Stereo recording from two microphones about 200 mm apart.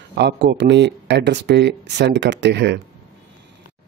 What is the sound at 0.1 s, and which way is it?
Speech, 55° right (ahead or behind).